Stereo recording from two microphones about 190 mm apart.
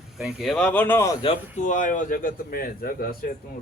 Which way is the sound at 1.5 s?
40° left (ahead or behind).